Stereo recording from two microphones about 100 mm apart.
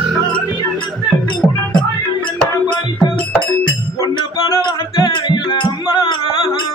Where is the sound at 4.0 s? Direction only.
40° left (ahead or behind).